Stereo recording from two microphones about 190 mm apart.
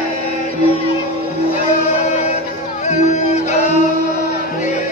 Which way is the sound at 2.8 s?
40° left (ahead or behind).